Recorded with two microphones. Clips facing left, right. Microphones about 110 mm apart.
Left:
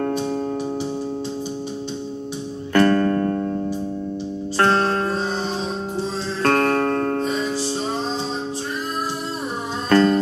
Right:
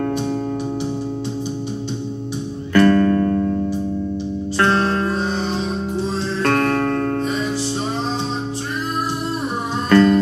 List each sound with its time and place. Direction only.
2.7 s music: 40° left (ahead or behind)
4.6 s music: 40° left (ahead or behind)
6.4 s music: 40° left (ahead or behind)
9.8 s music: 40° left (ahead or behind)